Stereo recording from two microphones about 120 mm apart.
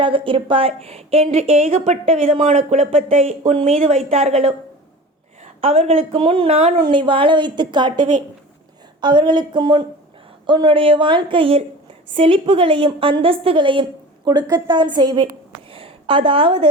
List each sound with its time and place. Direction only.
0.0 s a woman's voice: 45° right (ahead or behind); by 4.5 s 65° right (ahead or behind)
5.5 s a woman's voice: 50° right (ahead or behind)
6.7 s a woman's voice: 40° right (ahead or behind)
15.7 s a sound: 45° right (ahead or behind)